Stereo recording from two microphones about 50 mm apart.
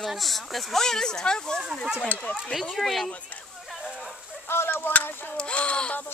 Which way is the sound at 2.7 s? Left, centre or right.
Centre.